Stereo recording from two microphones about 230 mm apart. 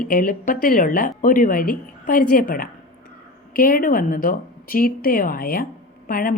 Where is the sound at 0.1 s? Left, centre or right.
Left.